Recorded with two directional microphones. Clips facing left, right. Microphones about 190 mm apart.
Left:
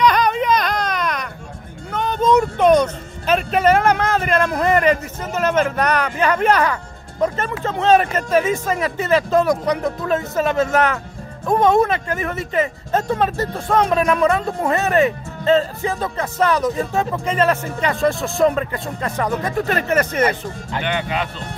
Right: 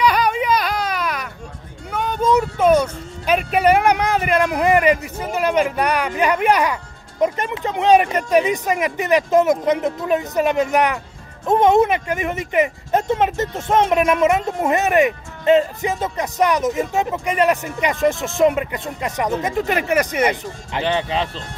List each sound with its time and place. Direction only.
0.0 s baby cry: 10° right (ahead or behind)
1.9 s speech: 10° right (ahead or behind)
20.8 s speech: 30° right (ahead or behind)